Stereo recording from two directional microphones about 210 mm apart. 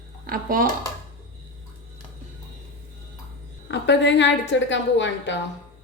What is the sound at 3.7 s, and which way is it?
A woman's voice, 55° left (ahead or behind).